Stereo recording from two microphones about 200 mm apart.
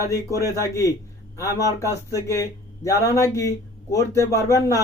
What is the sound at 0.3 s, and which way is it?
Speech, 15° left (ahead or behind).